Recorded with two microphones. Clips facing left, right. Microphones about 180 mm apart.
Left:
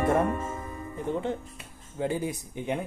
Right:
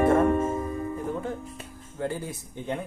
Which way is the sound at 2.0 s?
15° left (ahead or behind).